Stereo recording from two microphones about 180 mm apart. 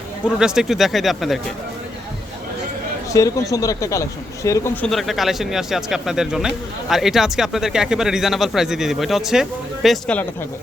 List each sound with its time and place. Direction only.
0.3 s speech: 5° right (ahead or behind)
3.1 s speech: 20° left (ahead or behind)